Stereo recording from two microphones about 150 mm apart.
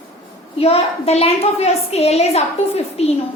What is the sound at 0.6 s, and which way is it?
A woman's voice, 40° left (ahead or behind).